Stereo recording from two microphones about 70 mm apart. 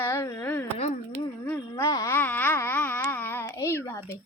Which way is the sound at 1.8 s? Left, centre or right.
Left.